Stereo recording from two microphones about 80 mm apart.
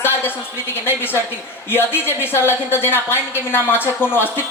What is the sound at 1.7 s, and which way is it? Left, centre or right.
A woman's voice, left.